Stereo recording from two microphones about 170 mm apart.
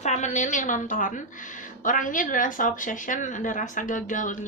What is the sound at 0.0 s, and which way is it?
A woman's voice, 45° left (ahead or behind).